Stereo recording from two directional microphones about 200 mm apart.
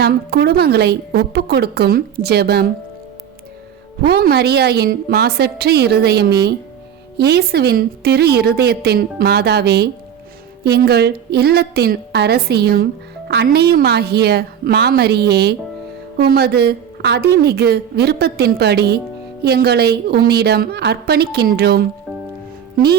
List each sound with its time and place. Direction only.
0.0 s a woman's voice: 50° right (ahead or behind)
4.0 s a woman's voice: 50° right (ahead or behind)